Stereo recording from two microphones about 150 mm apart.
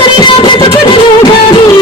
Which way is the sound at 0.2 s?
30° left (ahead or behind).